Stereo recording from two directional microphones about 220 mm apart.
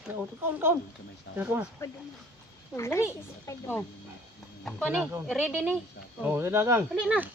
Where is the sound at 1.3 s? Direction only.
5° right (ahead or behind).